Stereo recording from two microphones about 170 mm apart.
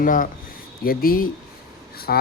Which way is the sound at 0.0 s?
55° left (ahead or behind).